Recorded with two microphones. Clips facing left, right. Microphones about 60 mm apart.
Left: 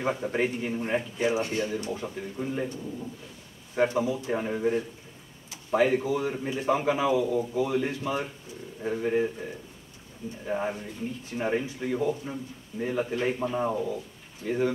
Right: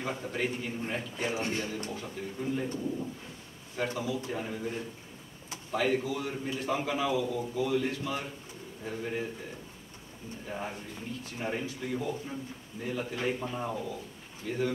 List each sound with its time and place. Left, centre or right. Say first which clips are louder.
0.0 s a man's voice: left 6 dB; left
3.7 s a man's voice: left 7 dB; left
5.7 s a man's voice: left 6 dB; centre
10.4 s a man's voice: left 8 dB; left